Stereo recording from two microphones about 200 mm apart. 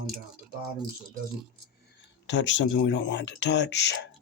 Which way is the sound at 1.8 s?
65° left (ahead or behind).